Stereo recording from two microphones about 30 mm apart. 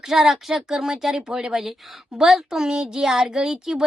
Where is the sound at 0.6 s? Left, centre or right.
Centre.